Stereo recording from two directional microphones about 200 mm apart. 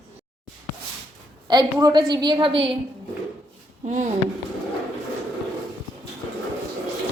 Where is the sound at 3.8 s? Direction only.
35° right (ahead or behind).